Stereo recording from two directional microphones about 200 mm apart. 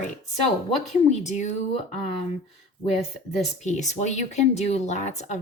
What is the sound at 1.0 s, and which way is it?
Speech, 35° left (ahead or behind).